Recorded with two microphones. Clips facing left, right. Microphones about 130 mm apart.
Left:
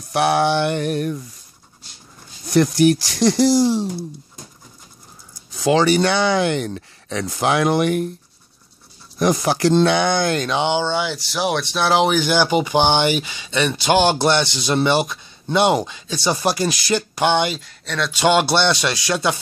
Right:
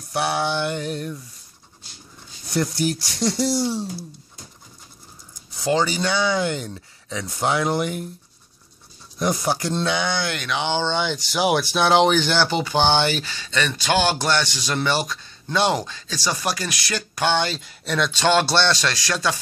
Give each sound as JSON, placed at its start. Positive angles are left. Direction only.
{"t": 0.1, "sound": "speech", "side_deg": 65}
{"t": 2.5, "sound": "speech", "side_deg": 90}
{"t": 5.7, "sound": "speech", "side_deg": 80}
{"t": 9.2, "sound": "speech", "side_deg": 90}
{"t": 10.6, "sound": "speech", "side_deg": 15}
{"t": 17.6, "sound": "speech", "side_deg": 0}
{"t": 18.1, "sound": "speech", "side_deg": 15}